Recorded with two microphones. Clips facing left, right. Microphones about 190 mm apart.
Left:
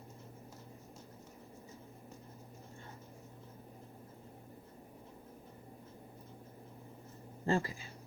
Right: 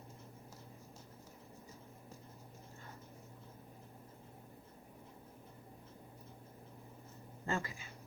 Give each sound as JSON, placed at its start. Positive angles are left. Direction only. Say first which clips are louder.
{"t": 7.4, "sound": "speech", "louder": "left 6 dB", "side_deg": 35}